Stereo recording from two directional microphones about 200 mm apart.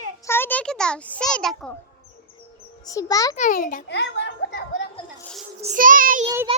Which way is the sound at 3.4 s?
40° left (ahead or behind).